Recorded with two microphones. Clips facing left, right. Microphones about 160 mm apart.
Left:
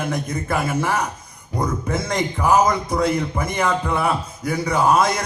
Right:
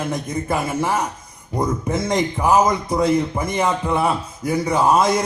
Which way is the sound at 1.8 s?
20° right (ahead or behind).